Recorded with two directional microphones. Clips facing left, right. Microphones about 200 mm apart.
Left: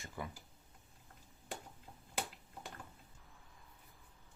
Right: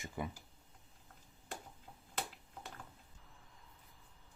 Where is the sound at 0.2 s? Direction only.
20° right (ahead or behind).